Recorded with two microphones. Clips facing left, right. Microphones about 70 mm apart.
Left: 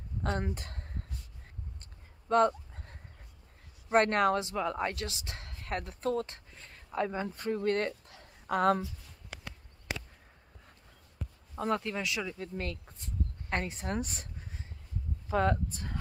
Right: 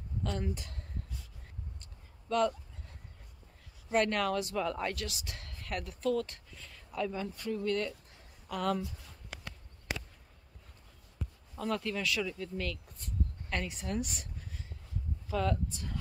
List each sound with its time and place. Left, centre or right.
0.2 s speech: left
2.2 s a sound: left
3.9 s speech: left
11.5 s speech: left